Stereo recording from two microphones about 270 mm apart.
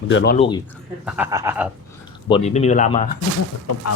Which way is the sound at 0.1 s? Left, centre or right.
Left.